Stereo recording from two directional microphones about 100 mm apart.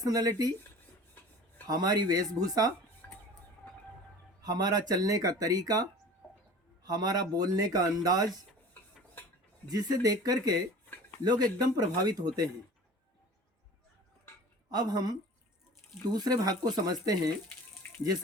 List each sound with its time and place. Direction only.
0.0 s speech: 40° right (ahead or behind)
1.6 s speech: 40° right (ahead or behind)
3.0 s train: 15° left (ahead or behind)
4.4 s speech: 40° right (ahead or behind)
9.6 s speech: 40° right (ahead or behind)
14.7 s speech: 45° right (ahead or behind)
17.8 s a sound: 20° left (ahead or behind)